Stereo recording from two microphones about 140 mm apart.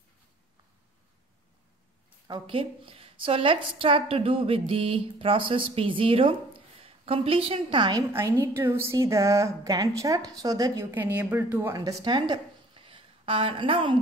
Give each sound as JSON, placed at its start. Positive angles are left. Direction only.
{"t": 2.2, "sound": "a woman's voice", "side_deg": -35}
{"t": 8.1, "sound": "a woman's voice", "side_deg": -15}
{"t": 11.7, "sound": "a woman's voice", "side_deg": -30}